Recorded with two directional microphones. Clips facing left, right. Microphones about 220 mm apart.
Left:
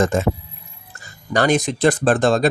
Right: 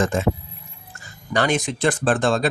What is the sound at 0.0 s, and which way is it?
Speech, 40° left (ahead or behind).